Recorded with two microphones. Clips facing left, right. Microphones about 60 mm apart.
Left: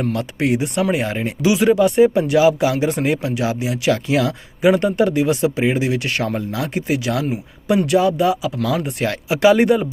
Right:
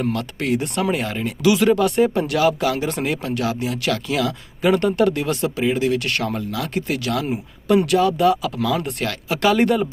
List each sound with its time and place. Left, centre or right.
0.1 s speech: centre
1.5 s speech: centre
3.9 s speech: left
4.6 s speech: centre
7.9 s speech: centre